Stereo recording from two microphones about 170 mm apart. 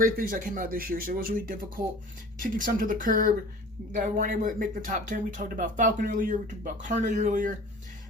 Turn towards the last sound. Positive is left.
turn(degrees=-50)  # may be behind; listen again after turning